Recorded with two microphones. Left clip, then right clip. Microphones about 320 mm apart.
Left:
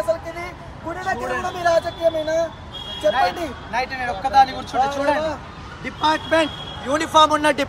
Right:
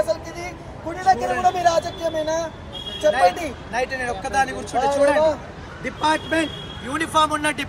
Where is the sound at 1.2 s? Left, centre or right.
Centre.